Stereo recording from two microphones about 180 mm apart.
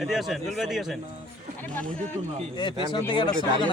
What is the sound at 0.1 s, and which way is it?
Speech, centre (ahead or behind).